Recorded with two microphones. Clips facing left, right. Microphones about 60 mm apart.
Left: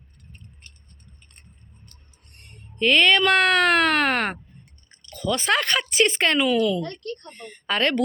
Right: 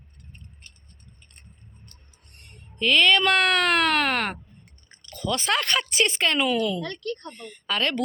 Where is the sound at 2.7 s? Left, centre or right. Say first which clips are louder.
Left 2 dB; left.